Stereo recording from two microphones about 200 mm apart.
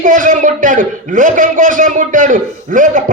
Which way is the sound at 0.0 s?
40° right (ahead or behind).